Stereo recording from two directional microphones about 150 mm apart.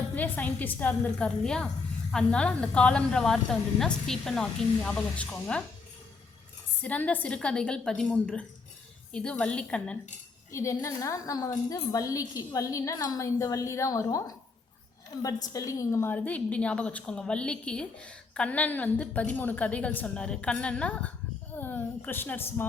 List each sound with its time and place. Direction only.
0.2 s a woman's voice: 10° left (ahead or behind)
6.8 s a woman's voice: 10° left (ahead or behind)
10.5 s a woman's voice: 20° left (ahead or behind)